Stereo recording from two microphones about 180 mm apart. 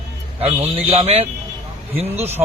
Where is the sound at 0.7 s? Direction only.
35° right (ahead or behind).